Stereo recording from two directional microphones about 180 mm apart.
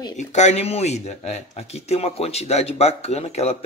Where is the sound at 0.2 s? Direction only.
40° left (ahead or behind).